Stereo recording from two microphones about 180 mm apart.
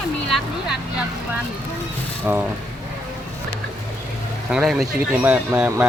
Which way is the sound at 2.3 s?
10° right (ahead or behind).